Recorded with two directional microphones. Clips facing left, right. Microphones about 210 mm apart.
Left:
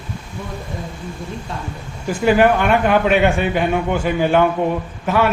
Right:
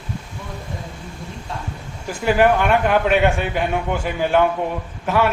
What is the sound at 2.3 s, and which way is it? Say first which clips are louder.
A man's voice: left 2 dB; 5° right (ahead or behind).